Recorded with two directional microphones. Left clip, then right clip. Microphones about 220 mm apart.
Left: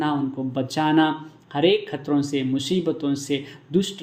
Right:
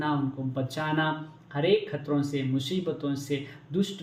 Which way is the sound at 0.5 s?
40° left (ahead or behind).